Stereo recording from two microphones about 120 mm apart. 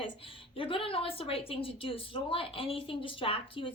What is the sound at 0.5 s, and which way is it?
A woman's voice, 50° left (ahead or behind).